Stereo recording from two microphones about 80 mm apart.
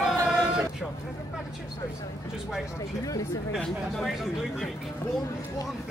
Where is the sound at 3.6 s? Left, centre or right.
Centre.